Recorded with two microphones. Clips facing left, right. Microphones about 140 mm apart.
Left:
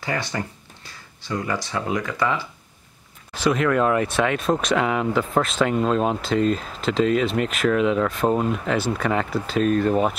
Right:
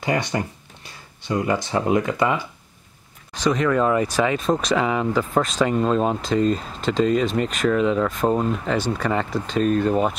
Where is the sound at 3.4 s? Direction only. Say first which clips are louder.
Even; 5° left (ahead or behind).